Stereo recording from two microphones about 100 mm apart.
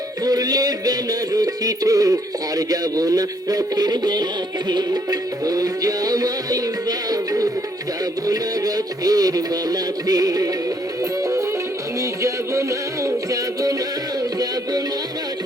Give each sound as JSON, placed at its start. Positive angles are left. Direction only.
{"t": 0.3, "sound": "music", "side_deg": -40}
{"t": 5.5, "sound": "music", "side_deg": -40}
{"t": 12.2, "sound": "music", "side_deg": -30}